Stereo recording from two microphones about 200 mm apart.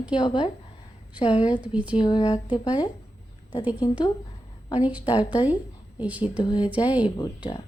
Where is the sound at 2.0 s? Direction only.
20° left (ahead or behind).